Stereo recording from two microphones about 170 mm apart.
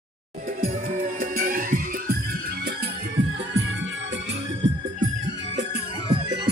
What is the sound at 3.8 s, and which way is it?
Music, 90° right.